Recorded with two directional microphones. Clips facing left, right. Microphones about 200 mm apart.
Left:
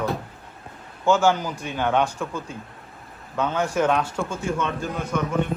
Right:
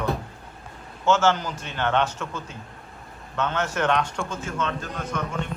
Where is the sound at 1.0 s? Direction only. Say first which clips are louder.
Left 2 dB; 10° left (ahead or behind).